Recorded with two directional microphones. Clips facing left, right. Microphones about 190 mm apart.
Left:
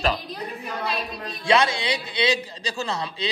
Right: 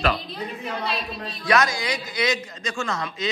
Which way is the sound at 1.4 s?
30° left (ahead or behind).